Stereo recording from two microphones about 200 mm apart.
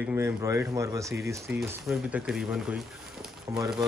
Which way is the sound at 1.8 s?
5° right (ahead or behind).